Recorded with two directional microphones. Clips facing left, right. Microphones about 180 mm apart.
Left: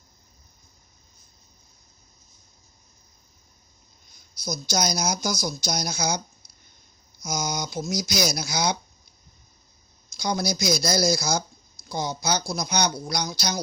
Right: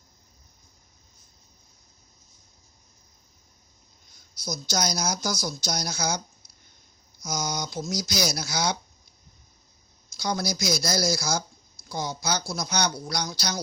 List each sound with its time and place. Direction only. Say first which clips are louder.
4.4 s a woman's voice: left 2 dB; 10° left (ahead or behind)
10.2 s a woman's voice: left 2 dB; 15° left (ahead or behind)